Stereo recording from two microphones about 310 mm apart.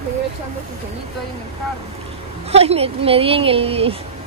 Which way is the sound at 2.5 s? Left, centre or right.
Centre.